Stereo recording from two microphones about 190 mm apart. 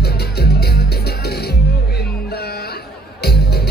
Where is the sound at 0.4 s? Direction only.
60° left (ahead or behind).